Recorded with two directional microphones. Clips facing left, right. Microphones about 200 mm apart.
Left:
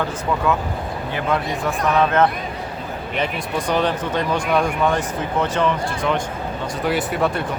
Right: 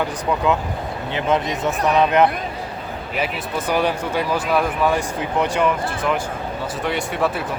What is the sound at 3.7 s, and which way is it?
Speech, 10° right (ahead or behind).